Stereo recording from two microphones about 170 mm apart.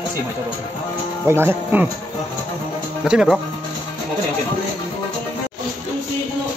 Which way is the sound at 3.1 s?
Centre (ahead or behind).